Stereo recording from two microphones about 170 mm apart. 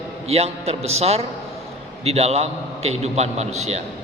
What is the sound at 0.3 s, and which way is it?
A man's voice, 35° right (ahead or behind).